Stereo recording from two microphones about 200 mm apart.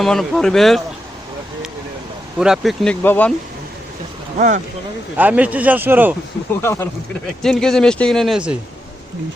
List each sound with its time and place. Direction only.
0.0 s speech: centre (ahead or behind)
2.4 s speech: centre (ahead or behind)
4.4 s speech: 40° right (ahead or behind)
5.1 s a man's voice: 10° right (ahead or behind)
6.6 s speech: 10° left (ahead or behind); by 8.5 s 5° right (ahead or behind)